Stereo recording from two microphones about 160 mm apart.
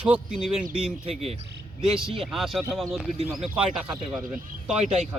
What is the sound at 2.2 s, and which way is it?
Speech, centre (ahead or behind).